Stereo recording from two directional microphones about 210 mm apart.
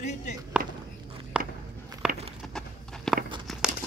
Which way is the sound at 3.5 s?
Centre (ahead or behind).